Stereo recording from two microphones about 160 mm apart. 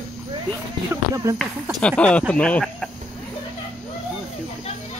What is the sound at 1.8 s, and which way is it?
Speech, 5° left (ahead or behind).